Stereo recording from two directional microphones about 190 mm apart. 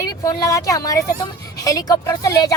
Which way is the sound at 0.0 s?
20° left (ahead or behind).